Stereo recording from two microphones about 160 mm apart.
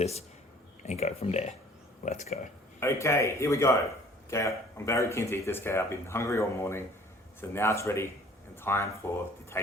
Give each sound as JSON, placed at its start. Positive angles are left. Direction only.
{"t": 0.0, "sound": "speech", "side_deg": 40}
{"t": 2.8, "sound": "speech", "side_deg": 15}